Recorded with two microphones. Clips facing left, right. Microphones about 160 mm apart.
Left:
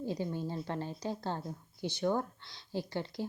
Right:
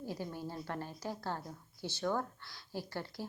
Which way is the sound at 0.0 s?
20° left (ahead or behind).